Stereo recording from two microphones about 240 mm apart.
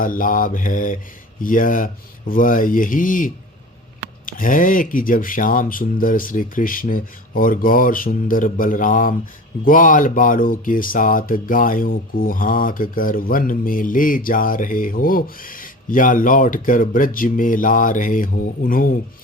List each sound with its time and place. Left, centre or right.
0.0 s speech: left